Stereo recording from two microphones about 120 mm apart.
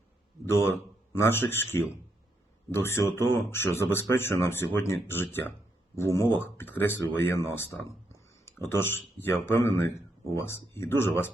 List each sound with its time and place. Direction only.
0.4 s speech: 20° left (ahead or behind)